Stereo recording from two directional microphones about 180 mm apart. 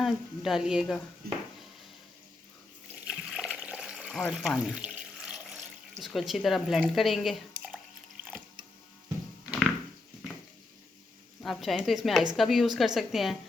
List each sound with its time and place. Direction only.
0.0 s speech: centre (ahead or behind)
1.2 s a sound: 55° right (ahead or behind)
3.1 s water: 5° right (ahead or behind)
6.0 s speech: centre (ahead or behind)
9.5 s a sound: centre (ahead or behind)
11.4 s speech: centre (ahead or behind)